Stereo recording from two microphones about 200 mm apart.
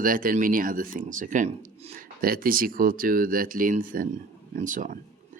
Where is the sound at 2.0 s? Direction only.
45° right (ahead or behind).